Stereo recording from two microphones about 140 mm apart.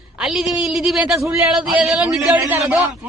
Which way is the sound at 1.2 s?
20° right (ahead or behind).